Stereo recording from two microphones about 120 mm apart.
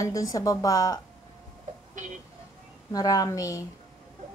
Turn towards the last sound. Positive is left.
turn(degrees=30)  # may be behind; listen again after turning